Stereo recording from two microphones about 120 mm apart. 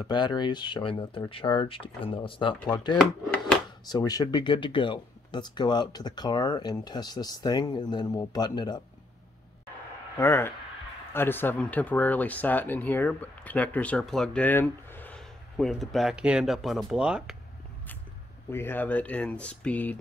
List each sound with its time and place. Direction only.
0.0 s speech: 40° left (ahead or behind)
10.1 s speech: 20° left (ahead or behind)
15.1 s speech: 5° left (ahead or behind)
18.5 s speech: 20° left (ahead or behind)